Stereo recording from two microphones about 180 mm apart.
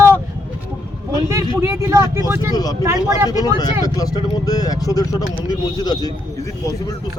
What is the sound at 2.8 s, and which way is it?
Speech, 15° right (ahead or behind).